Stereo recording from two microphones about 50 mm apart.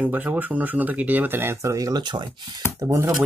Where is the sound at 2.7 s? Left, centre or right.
Right.